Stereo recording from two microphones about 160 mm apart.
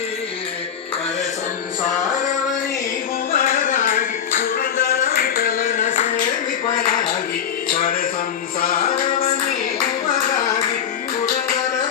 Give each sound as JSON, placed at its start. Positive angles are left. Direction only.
{"t": 3.3, "sound": "a sound", "side_deg": 65}
{"t": 7.7, "sound": "music", "side_deg": 60}
{"t": 10.1, "sound": "clapping", "side_deg": 55}